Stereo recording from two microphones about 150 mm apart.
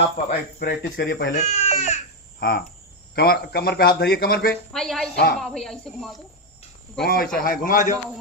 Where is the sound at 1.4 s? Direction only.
50° left (ahead or behind).